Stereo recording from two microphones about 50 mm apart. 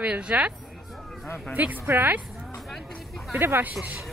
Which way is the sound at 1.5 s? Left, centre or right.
Right.